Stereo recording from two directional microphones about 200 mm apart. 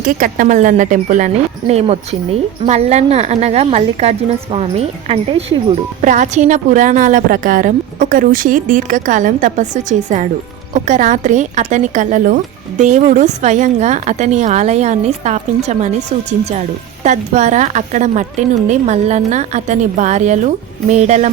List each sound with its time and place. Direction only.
0.0 s a woman's voice: 40° right (ahead or behind)